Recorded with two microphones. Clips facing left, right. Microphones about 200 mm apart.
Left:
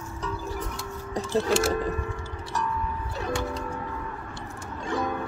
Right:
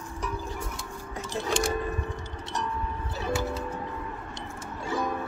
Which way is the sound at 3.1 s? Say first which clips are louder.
Right 1 dB; 5° right (ahead or behind).